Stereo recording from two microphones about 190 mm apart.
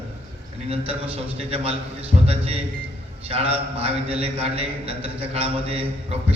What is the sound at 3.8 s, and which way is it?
A man's voice, 30° right (ahead or behind).